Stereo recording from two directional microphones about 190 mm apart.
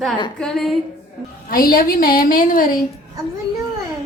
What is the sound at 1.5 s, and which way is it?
A woman's voice, 50° left (ahead or behind).